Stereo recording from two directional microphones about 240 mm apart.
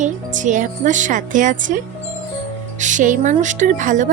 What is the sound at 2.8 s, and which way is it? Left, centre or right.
Speech, right.